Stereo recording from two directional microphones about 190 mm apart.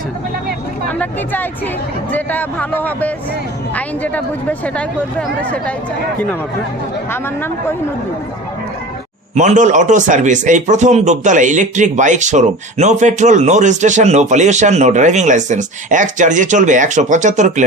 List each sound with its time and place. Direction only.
0.9 s speech: 10° left (ahead or behind)
9.3 s a man's voice: 40° right (ahead or behind)